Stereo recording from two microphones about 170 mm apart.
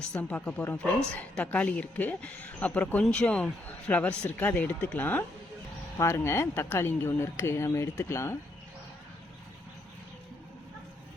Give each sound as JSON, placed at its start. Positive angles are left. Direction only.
{"t": 0.1, "sound": "speech", "side_deg": 10}